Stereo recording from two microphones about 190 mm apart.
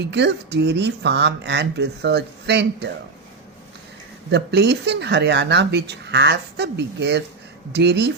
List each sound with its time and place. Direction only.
0.0 s speech: 65° right (ahead or behind)
4.3 s speech: 60° right (ahead or behind)